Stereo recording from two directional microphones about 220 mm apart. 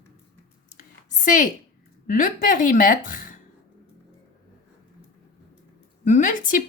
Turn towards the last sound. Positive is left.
turn(degrees=35)  # may be behind; listen again after turning